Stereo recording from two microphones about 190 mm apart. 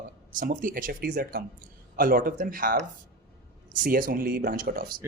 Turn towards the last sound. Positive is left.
turn(degrees=-50)  # may be behind; listen again after turning